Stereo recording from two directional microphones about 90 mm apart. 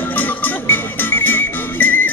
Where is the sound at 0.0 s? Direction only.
20° left (ahead or behind).